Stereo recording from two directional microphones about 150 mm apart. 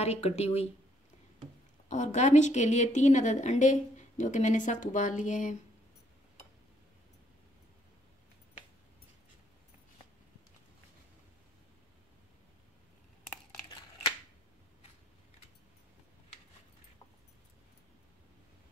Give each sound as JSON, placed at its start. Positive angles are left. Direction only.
{"t": 0.0, "sound": "speech", "side_deg": 45}
{"t": 1.9, "sound": "a woman's voice", "side_deg": 55}